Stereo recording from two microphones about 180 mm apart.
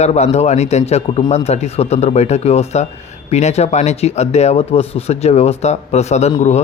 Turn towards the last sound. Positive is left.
turn(degrees=35)  # may be behind; listen again after turning